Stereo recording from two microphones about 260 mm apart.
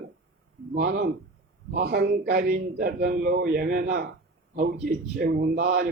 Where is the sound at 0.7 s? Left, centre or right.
Right.